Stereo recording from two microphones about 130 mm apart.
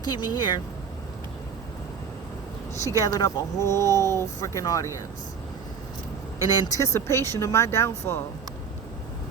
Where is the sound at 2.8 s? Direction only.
30° left (ahead or behind).